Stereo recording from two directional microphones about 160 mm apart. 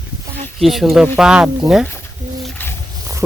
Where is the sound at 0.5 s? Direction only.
Centre (ahead or behind).